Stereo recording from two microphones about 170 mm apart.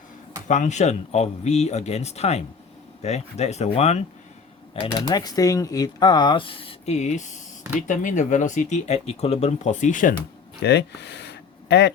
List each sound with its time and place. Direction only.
0.4 s speech: 45° left (ahead or behind)
10.6 s speech: 80° left